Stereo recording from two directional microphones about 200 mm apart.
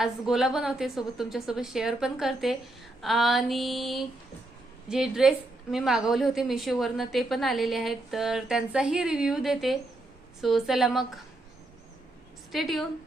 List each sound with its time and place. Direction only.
0.0 s a woman's voice: centre (ahead or behind)
12.5 s a woman's voice: centre (ahead or behind)